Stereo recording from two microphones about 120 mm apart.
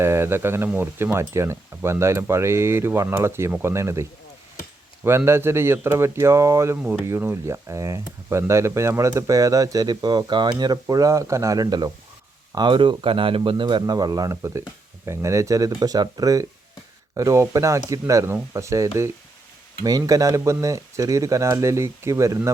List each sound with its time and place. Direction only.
0.0 s speech: 20° right (ahead or behind)
5.0 s speech: 20° right (ahead or behind)